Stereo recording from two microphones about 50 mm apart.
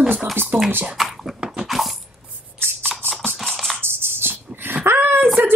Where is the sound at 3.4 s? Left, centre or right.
Centre.